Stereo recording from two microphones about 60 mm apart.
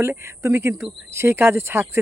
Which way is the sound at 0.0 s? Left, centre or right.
Right.